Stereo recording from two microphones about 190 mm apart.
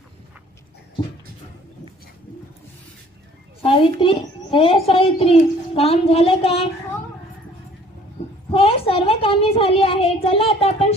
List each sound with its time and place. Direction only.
3.6 s a child's voice: 25° left (ahead or behind)
8.5 s a child's voice: 30° left (ahead or behind)